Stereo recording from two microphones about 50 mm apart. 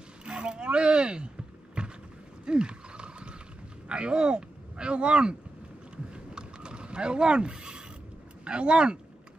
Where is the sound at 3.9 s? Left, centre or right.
Centre.